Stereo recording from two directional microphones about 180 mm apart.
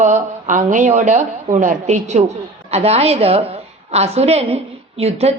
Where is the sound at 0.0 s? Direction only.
45° right (ahead or behind).